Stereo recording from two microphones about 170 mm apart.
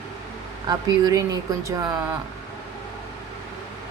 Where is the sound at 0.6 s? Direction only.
20° right (ahead or behind).